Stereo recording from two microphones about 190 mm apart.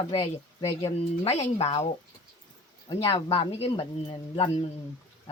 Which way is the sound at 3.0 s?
30° left (ahead or behind).